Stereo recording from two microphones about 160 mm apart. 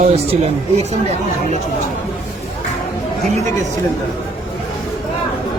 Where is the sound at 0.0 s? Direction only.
40° right (ahead or behind).